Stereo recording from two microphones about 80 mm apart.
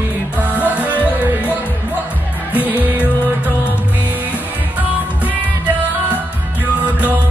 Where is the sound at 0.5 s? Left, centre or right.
Right.